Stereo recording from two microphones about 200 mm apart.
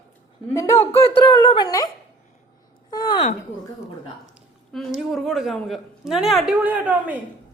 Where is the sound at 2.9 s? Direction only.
20° left (ahead or behind).